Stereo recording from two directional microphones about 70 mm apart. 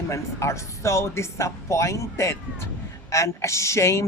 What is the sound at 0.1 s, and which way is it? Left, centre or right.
Speech, left.